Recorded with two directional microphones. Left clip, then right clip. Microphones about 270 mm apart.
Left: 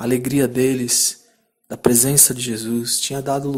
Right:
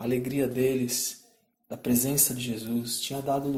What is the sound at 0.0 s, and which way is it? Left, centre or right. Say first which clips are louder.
Speech: left 9 dB; left.